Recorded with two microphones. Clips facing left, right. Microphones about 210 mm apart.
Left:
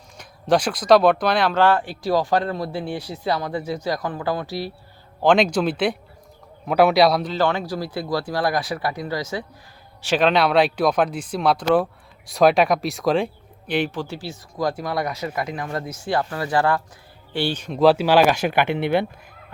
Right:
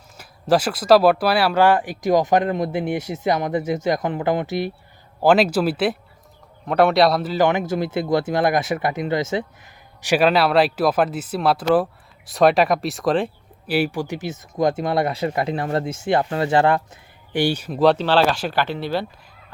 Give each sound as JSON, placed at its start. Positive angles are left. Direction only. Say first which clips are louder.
{"t": 0.2, "sound": "speech", "louder": "right 1 dB", "side_deg": -5}
{"t": 5.2, "sound": "speech", "louder": "right 1 dB", "side_deg": -5}
{"t": 7.3, "sound": "speech", "louder": "right 3 dB", "side_deg": -20}
{"t": 10.0, "sound": "speech", "louder": "right 1 dB", "side_deg": -10}